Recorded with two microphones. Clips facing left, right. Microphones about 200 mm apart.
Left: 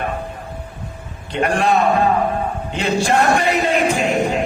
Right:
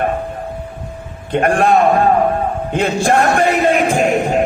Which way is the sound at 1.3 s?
50° right (ahead or behind).